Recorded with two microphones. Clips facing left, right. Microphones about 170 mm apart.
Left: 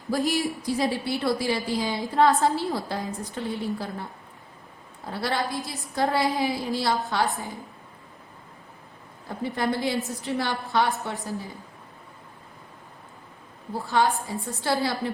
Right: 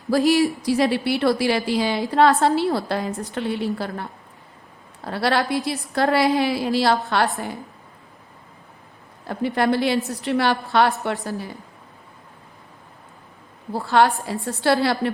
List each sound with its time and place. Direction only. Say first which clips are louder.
0.1 s a woman's voice: right 8 dB; 80° right
5.0 s a woman's voice: right 6 dB; 75° right (ahead or behind)
9.2 s a woman's voice: right 6 dB; 75° right (ahead or behind)
13.7 s a woman's voice: right 5 dB; 70° right (ahead or behind)